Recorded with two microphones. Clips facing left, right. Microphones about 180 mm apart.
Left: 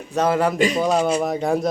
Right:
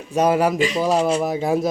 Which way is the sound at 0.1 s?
10° right (ahead or behind).